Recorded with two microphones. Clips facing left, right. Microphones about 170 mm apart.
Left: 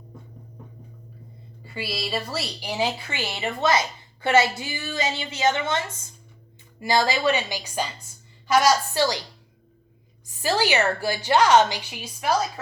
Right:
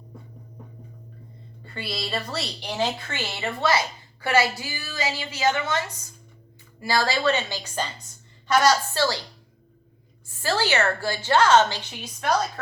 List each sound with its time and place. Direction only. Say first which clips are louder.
1.6 s a woman's voice: left 1 dB; 5° left (ahead or behind)
10.2 s a woman's voice: left 2 dB; 15° left (ahead or behind)